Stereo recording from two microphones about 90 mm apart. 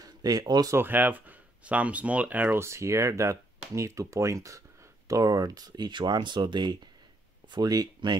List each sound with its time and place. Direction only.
0.0 s speech: 45° right (ahead or behind)
0.7 s speech: 20° right (ahead or behind); by 8.2 s 50° right (ahead or behind)